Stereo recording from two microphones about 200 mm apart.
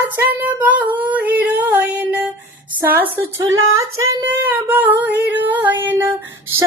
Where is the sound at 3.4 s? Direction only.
80° right.